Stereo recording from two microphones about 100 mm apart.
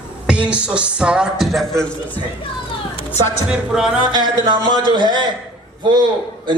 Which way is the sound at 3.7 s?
5° right (ahead or behind).